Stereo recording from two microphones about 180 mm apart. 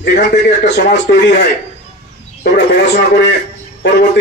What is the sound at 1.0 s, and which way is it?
A man's voice, 70° left (ahead or behind).